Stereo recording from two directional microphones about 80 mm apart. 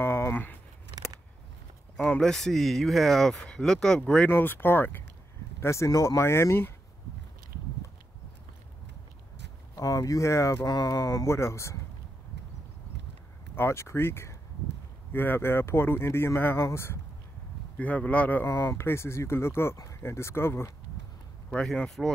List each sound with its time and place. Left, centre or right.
0.0 s a sound: left
2.0 s speech: centre
4.3 s speech: left
9.8 s speech: left
11.2 s speech: left
13.6 s speech: left
17.7 s speech: centre
18.5 s speech: left
21.5 s speech: centre